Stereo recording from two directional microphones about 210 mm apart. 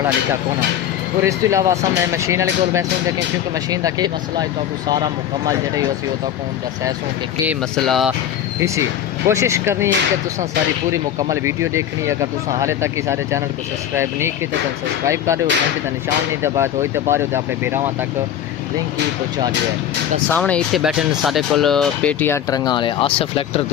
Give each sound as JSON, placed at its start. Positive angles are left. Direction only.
{"t": 1.2, "sound": "speech", "side_deg": -15}
{"t": 7.4, "sound": "speech", "side_deg": 0}
{"t": 9.2, "sound": "speech", "side_deg": -15}
{"t": 10.9, "sound": "speech", "side_deg": -15}
{"t": 16.4, "sound": "speech", "side_deg": -10}
{"t": 20.3, "sound": "speech", "side_deg": 5}